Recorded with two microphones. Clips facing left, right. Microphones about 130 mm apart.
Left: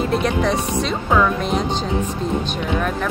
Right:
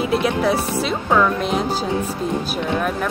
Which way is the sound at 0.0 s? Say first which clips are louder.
Right 1 dB; 5° right (ahead or behind).